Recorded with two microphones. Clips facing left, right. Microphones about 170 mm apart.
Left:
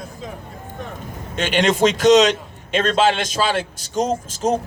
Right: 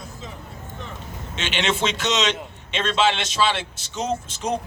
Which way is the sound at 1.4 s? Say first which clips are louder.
Left 7 dB; 50° left (ahead or behind).